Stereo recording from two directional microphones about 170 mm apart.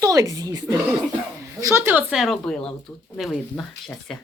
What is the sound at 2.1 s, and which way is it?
Speech, centre (ahead or behind).